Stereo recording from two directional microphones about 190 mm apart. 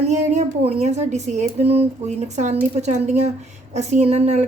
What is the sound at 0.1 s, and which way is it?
A woman's voice, 35° right (ahead or behind).